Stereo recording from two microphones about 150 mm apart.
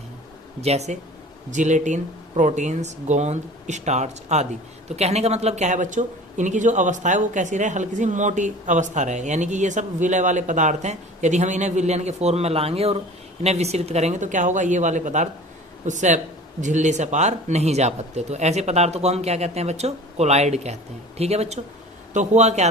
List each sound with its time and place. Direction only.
0.6 s speech: 45° right (ahead or behind)